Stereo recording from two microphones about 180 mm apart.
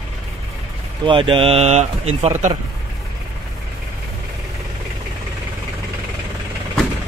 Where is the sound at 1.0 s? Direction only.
30° right (ahead or behind).